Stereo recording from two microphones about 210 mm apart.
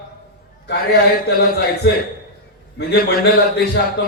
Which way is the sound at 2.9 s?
45° left (ahead or behind).